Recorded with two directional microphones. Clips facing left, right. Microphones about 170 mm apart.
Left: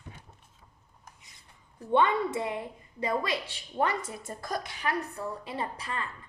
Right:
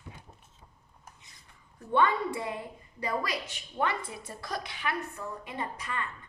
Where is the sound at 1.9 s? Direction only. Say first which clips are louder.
Left 2 dB; 25° left (ahead or behind).